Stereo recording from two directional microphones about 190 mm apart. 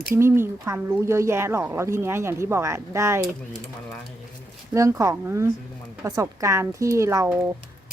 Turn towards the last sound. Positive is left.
turn(degrees=-15)  # may be behind; listen again after turning